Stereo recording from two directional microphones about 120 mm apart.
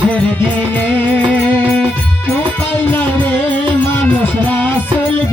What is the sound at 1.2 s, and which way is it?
Music, 10° left (ahead or behind).